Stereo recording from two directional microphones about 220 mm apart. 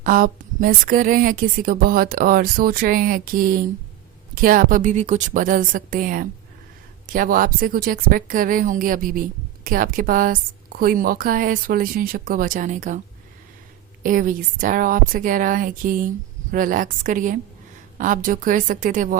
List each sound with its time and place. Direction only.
0.0 s a woman's voice: 40° right (ahead or behind)
14.0 s a woman's voice: 40° right (ahead or behind)